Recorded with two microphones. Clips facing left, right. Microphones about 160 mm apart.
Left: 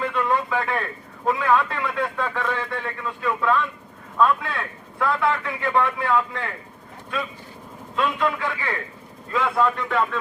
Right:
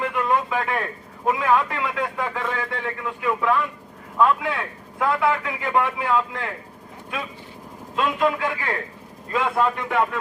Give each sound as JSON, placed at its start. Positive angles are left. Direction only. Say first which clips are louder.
{"t": 0.0, "sound": "a sound", "louder": "right 1 dB", "side_deg": -15}
{"t": 1.2, "sound": "a man's voice", "louder": "even", "side_deg": -15}
{"t": 7.9, "sound": "a man's voice", "louder": "right 2 dB", "side_deg": -15}